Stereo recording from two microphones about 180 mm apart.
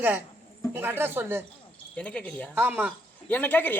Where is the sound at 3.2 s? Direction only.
10° left (ahead or behind).